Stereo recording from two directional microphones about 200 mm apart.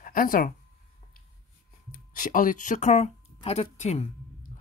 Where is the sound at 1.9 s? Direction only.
45° left (ahead or behind).